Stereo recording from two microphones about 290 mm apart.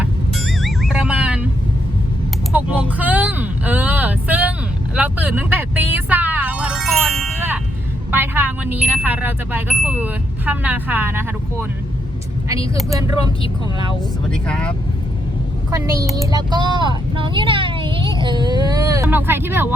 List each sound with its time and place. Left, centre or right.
0.0 s vehicle: centre
2.5 s vehicle: centre
4.9 s music: centre
8.1 s speech: centre
12.9 s speech: centre
14.3 s speech: centre
15.7 s speech: centre